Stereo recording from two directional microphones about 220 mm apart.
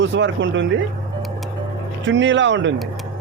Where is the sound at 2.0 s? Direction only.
55° right (ahead or behind).